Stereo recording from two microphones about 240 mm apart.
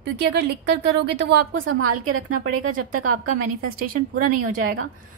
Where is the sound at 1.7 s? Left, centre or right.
Right.